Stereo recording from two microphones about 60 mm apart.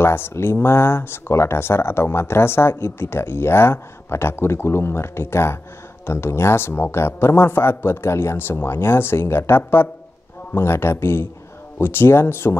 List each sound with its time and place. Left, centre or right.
0.0 s speech: left